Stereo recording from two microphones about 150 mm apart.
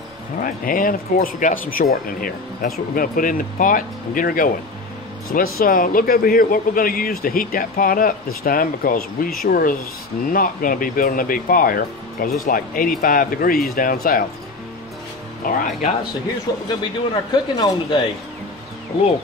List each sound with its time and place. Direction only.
0.4 s speech: 65° left (ahead or behind)
15.4 s speech: 60° left (ahead or behind)
16.6 s speech: 30° left (ahead or behind)